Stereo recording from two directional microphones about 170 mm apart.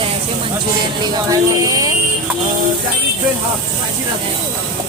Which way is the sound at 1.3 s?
20° right (ahead or behind).